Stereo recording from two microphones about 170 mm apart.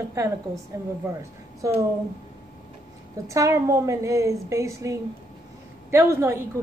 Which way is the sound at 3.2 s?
20° right (ahead or behind).